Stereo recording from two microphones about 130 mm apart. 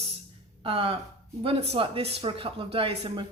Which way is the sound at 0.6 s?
45° right (ahead or behind).